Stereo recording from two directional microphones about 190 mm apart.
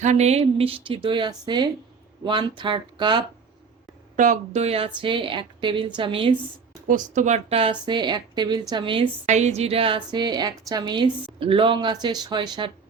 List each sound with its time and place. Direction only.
0.0 s a woman's voice: 35° right (ahead or behind)
4.2 s a woman's voice: 40° right (ahead or behind)
6.8 s a woman's voice: 40° right (ahead or behind); by 9.0 s 25° right (ahead or behind)
9.2 s a woman's voice: 35° right (ahead or behind)